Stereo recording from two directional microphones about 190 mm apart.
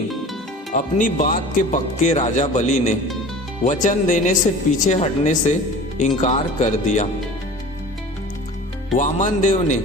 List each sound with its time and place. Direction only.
0.7 s speech: 45° left (ahead or behind)
9.0 s speech: 40° left (ahead or behind)